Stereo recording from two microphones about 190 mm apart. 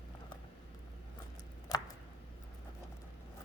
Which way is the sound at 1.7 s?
20° left (ahead or behind).